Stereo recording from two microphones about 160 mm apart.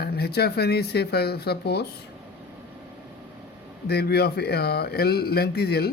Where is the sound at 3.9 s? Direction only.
85° left.